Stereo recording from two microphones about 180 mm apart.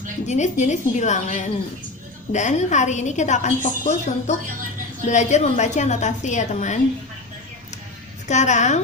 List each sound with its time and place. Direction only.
0.3 s a woman's voice: 40° left (ahead or behind)
8.3 s a woman's voice: 40° left (ahead or behind)